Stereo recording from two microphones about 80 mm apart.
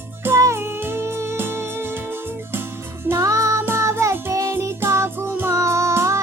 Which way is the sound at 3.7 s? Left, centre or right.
Right.